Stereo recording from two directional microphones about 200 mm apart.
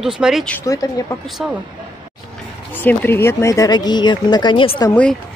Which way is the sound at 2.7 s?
10° left (ahead or behind).